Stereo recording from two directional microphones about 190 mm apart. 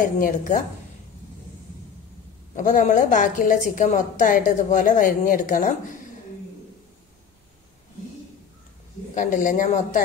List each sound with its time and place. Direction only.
0.0 s a woman's voice: 45° left (ahead or behind)
2.5 s a woman's voice: 40° left (ahead or behind)
9.1 s a woman's voice: 45° left (ahead or behind)